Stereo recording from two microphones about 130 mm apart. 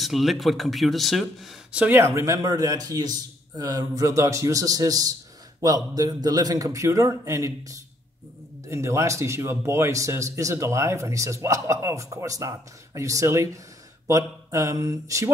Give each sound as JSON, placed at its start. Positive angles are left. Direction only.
{"t": 0.0, "sound": "speech", "side_deg": 0}